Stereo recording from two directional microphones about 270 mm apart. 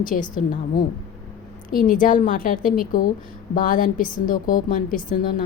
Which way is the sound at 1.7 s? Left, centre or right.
Left.